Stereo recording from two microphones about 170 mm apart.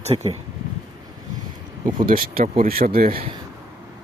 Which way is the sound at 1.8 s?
55° right (ahead or behind).